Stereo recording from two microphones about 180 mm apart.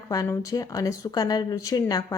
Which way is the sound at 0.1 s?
20° left (ahead or behind).